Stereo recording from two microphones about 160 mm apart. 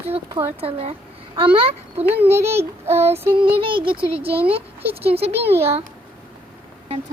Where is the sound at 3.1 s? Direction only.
35° right (ahead or behind).